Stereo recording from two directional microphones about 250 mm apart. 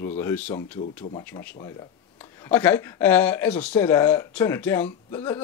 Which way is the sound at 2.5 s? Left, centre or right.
Centre.